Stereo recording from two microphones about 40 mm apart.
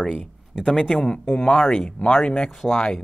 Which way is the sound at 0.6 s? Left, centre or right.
Centre.